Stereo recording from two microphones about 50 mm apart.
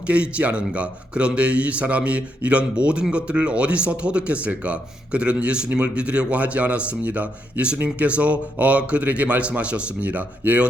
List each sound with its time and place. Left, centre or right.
0.1 s a man's voice: right